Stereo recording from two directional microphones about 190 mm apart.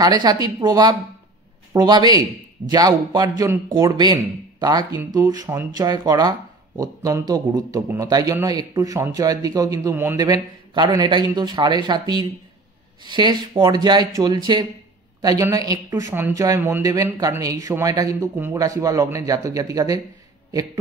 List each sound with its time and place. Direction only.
0.0 s a man's voice: 20° right (ahead or behind)